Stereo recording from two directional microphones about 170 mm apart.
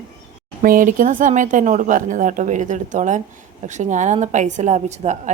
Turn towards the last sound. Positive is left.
turn(degrees=-45)  # may be behind; listen again after turning